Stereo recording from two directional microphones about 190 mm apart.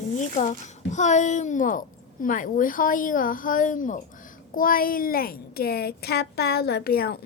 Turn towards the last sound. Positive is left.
turn(degrees=55)  # may be behind; listen again after turning